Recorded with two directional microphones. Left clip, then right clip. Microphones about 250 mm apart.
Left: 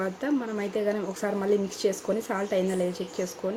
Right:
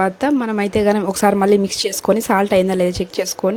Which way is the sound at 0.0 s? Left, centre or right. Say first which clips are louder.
Right 12 dB; right.